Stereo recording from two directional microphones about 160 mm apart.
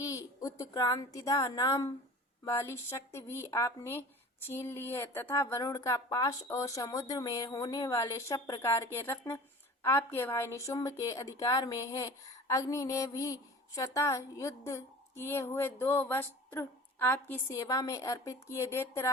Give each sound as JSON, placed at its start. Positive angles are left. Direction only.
{"t": 0.0, "sound": "a woman's voice", "side_deg": 20}